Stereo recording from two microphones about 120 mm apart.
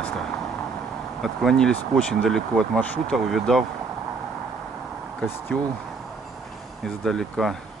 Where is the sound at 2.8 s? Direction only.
15° left (ahead or behind).